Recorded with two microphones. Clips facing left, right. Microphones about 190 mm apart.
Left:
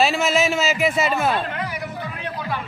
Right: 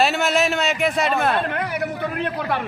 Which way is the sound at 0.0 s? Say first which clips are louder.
Even; centre (ahead or behind).